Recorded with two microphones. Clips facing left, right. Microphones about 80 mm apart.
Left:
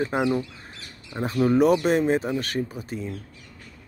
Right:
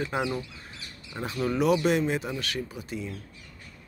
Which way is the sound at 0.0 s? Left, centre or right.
Left.